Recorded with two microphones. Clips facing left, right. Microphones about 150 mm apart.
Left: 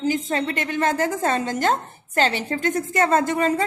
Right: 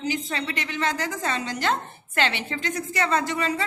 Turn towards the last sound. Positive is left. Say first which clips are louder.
# left 5 dB
turn(degrees=50)  # may be behind; listen again after turning